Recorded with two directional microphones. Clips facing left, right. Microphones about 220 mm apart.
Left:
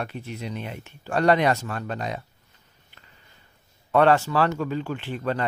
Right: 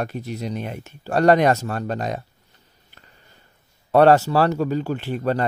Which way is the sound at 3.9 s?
40° right (ahead or behind).